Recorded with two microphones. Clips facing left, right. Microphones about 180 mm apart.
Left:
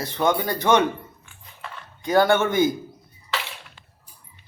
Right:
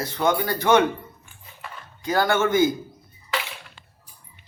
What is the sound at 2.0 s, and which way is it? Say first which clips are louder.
Speech: left 3 dB; 20° left (ahead or behind).